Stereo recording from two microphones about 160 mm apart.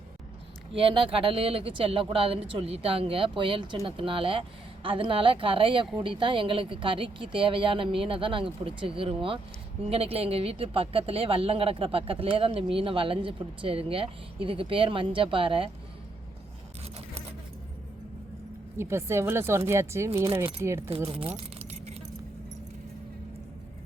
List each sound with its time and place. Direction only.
0.8 s speech: 35° right (ahead or behind)
18.8 s speech: 15° right (ahead or behind)
20.9 s speech: 35° right (ahead or behind)